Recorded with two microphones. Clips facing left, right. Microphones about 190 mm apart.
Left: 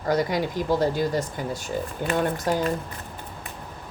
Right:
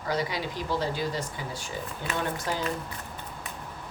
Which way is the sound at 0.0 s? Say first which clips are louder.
Left 6 dB; 45° left (ahead or behind).